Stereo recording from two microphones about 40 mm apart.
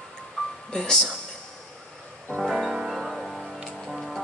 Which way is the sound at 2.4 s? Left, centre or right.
Centre.